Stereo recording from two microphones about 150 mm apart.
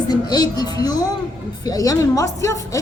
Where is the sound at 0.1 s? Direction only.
25° left (ahead or behind).